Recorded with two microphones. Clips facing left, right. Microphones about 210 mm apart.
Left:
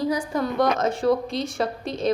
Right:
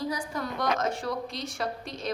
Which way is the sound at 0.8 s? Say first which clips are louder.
Left 9 dB; 25° left (ahead or behind).